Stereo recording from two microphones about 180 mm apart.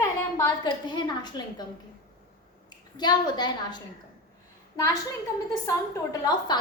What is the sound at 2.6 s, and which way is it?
A woman's voice, 25° left (ahead or behind).